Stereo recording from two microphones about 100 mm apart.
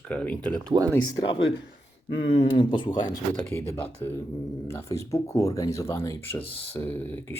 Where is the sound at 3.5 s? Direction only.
25° left (ahead or behind).